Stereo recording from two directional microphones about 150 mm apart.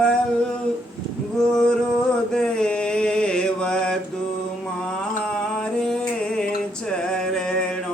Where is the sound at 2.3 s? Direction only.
5° left (ahead or behind).